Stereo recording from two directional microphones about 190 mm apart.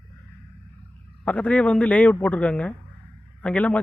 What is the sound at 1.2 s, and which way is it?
Speech, 5° left (ahead or behind).